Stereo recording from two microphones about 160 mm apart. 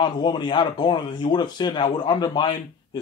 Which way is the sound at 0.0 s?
30° left (ahead or behind).